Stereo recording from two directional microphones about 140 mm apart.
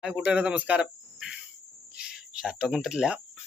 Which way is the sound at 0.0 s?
5° right (ahead or behind).